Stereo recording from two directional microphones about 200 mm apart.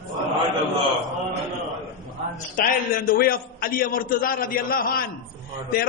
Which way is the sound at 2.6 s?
45° left (ahead or behind).